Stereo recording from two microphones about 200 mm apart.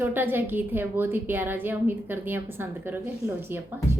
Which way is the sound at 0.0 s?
10° right (ahead or behind).